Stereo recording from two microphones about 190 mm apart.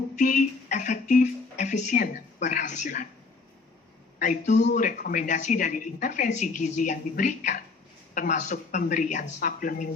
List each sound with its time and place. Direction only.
0.2 s speech: 40° left (ahead or behind)
4.2 s speech: 40° left (ahead or behind)